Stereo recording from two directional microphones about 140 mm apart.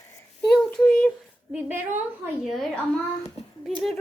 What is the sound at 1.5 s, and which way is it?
Speech, 15° right (ahead or behind).